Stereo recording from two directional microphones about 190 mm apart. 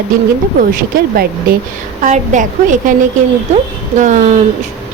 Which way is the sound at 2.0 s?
40° right (ahead or behind).